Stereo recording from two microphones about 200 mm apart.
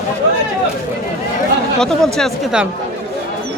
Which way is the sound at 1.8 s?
5° left (ahead or behind).